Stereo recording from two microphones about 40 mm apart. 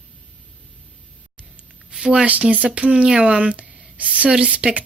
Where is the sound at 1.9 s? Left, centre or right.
Right.